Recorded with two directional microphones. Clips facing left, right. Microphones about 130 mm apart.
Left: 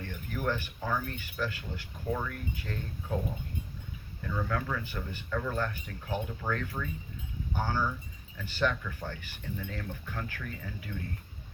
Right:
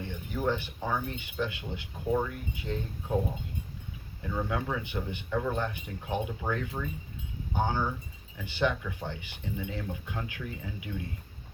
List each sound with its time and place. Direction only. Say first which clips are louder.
0.0 s speech: right 3 dB; 15° right (ahead or behind)
4.2 s speech: right 1 dB; 20° right (ahead or behind)